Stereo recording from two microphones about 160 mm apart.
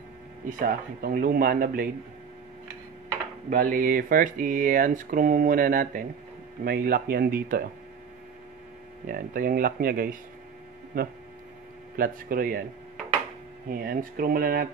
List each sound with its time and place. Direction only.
0.5 s speech: 60° right (ahead or behind)
3.4 s speech: 60° right (ahead or behind)
9.0 s speech: 60° right (ahead or behind)
13.7 s speech: 65° right (ahead or behind)